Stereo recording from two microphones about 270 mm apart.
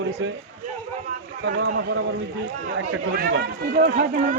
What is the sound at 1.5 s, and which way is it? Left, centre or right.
A man's voice, right.